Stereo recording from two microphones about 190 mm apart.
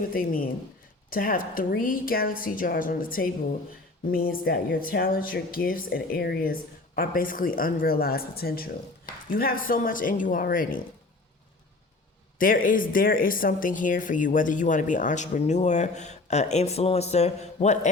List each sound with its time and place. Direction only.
0.1 s speech: 50° left (ahead or behind)
12.4 s speech: 45° left (ahead or behind)